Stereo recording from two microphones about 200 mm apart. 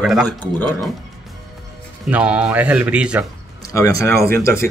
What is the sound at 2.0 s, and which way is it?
Speech, 5° right (ahead or behind).